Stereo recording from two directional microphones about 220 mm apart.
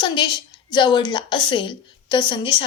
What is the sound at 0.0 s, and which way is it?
A woman's voice, 20° left (ahead or behind).